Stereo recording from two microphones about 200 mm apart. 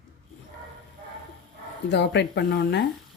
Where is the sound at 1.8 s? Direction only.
60° left (ahead or behind).